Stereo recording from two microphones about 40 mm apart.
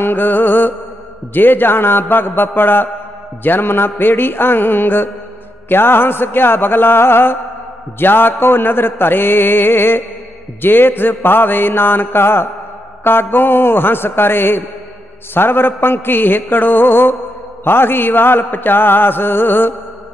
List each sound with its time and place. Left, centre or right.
0.0 s music: left
1.3 s mantra: left
8.0 s mantra: left
13.0 s mantra: left